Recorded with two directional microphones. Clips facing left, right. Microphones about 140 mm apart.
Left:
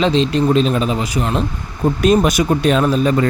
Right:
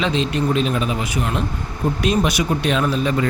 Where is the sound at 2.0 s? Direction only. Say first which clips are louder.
Left 6 dB; 45° left (ahead or behind).